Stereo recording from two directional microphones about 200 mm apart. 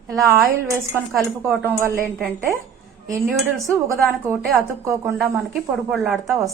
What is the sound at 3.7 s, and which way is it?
Speech, 15° right (ahead or behind).